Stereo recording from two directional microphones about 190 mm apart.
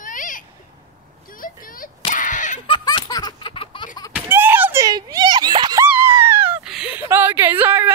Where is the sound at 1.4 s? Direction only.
45° left (ahead or behind).